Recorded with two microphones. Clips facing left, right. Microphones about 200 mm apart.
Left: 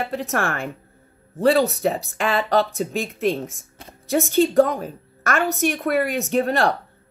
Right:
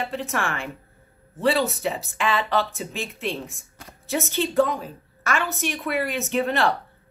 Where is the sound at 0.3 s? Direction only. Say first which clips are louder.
Left 4 dB; 40° left (ahead or behind).